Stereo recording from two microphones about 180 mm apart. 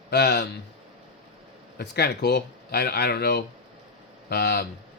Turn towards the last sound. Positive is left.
turn(degrees=65)  # may be behind; listen again after turning